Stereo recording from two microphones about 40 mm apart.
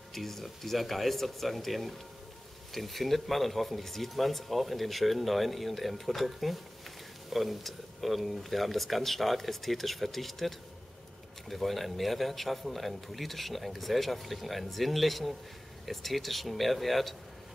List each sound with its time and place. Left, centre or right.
0.1 s speech: centre